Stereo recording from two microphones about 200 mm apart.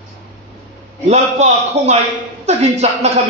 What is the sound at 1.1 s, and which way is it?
A man's voice, 35° right (ahead or behind).